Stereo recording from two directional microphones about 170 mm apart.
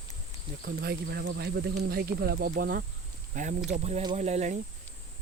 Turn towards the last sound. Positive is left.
turn(degrees=-40)  # may be behind; listen again after turning